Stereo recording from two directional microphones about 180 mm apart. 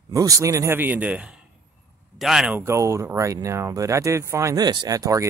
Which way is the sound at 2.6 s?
15° right (ahead or behind).